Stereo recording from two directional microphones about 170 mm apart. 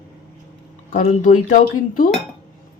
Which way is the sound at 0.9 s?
50° left (ahead or behind).